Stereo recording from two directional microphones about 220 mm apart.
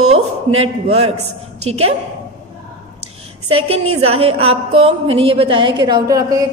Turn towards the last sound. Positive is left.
turn(degrees=-15)  # may be behind; listen again after turning